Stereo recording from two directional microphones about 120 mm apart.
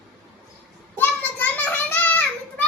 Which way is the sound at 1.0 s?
15° left (ahead or behind).